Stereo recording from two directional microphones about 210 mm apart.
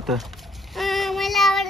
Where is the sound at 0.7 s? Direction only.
Centre (ahead or behind).